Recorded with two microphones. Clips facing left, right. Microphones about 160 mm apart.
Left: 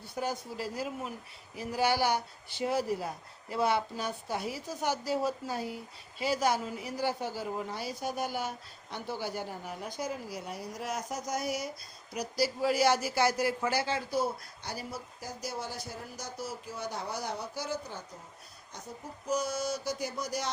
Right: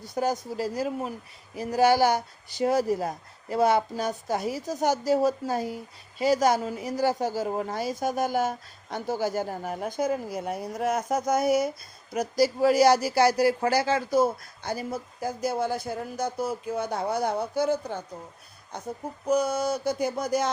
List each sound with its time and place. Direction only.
0.0 s speech: 40° right (ahead or behind)